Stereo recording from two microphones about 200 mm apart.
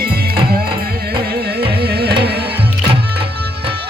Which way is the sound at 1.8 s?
50° right (ahead or behind).